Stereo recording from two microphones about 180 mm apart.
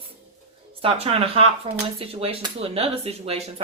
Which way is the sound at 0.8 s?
30° right (ahead or behind).